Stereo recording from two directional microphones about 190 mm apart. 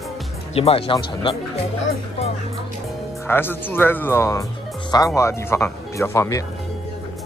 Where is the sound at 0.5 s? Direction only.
30° left (ahead or behind).